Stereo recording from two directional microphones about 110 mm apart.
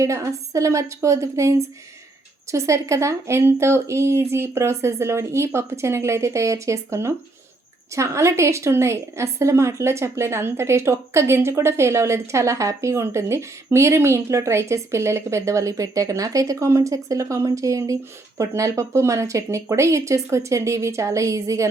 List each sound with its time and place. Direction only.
0.0 s a woman's voice: 30° right (ahead or behind)